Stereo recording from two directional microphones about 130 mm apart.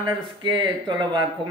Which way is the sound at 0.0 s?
35° right (ahead or behind).